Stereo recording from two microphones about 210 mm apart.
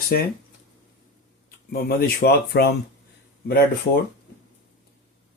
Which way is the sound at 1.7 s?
50° left (ahead or behind).